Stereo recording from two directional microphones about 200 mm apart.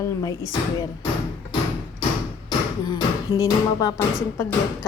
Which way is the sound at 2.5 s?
20° left (ahead or behind).